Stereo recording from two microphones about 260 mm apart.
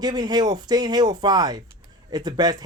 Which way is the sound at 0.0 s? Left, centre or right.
Centre.